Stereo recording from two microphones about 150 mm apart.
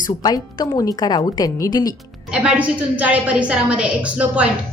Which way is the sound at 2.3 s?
10° right (ahead or behind).